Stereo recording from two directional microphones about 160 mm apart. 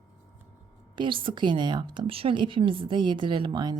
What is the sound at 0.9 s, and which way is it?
A woman's voice, 30° right (ahead or behind).